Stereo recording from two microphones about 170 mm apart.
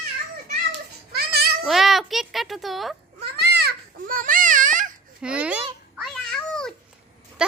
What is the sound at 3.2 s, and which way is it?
Babbling, 70° right (ahead or behind).